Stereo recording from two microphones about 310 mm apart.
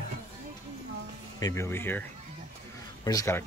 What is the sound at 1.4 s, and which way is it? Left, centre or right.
Speech, centre.